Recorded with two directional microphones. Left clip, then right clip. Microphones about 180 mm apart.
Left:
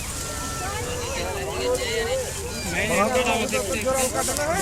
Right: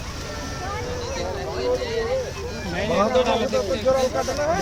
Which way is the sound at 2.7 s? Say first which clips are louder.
Right 2 dB; 40° right (ahead or behind).